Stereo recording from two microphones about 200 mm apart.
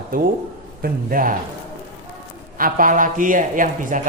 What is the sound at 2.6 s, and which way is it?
Speech, 45° right (ahead or behind).